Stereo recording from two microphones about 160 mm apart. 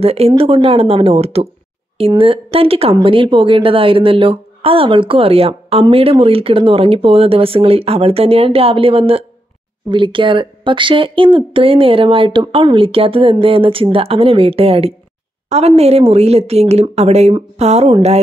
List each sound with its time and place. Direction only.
0.0 s speech: 40° right (ahead or behind)